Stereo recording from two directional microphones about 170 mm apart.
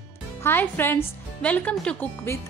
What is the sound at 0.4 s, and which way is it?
A woman's voice, 10° left (ahead or behind).